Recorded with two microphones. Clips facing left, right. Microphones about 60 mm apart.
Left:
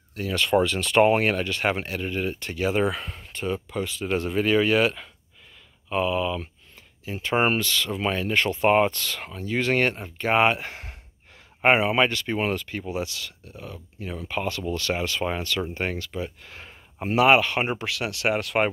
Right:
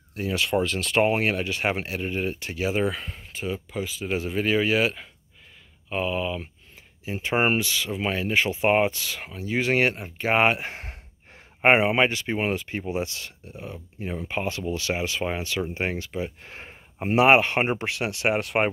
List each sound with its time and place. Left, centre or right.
0.1 s speech: centre
0.5 s speech: centre
10.7 s gasp: right
11.6 s speech: right
12.9 s speech: right
16.4 s a sound: right
17.1 s speech: right